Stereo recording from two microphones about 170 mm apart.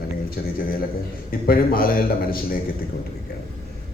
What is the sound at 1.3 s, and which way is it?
A man's voice, 60° left (ahead or behind).